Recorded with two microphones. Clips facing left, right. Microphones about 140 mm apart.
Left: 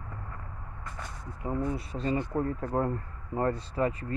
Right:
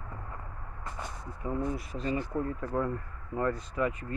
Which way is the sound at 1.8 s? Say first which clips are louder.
Left 2 dB; 30° left (ahead or behind).